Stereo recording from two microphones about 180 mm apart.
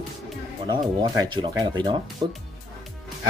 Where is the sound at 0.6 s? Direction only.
25° right (ahead or behind).